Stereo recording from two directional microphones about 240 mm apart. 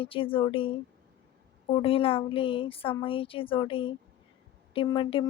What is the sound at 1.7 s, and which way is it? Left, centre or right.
Speech, left.